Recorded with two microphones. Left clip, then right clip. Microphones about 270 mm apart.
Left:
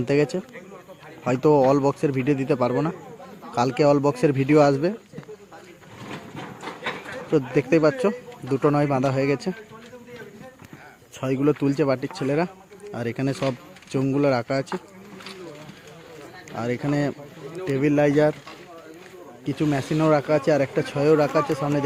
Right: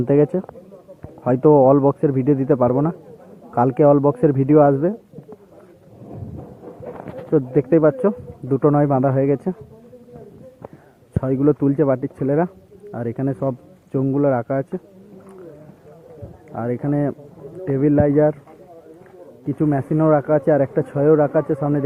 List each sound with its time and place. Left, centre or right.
0.1 s speech: centre
7.3 s speech: centre
11.2 s speech: centre
16.5 s speech: centre
19.5 s speech: centre